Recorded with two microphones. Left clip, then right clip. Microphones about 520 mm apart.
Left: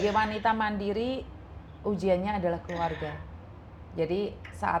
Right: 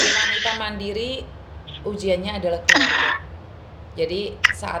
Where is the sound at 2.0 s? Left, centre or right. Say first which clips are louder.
Right 5 dB; left.